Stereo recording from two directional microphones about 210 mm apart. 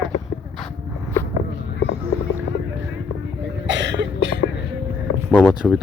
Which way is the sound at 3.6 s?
55° right (ahead or behind).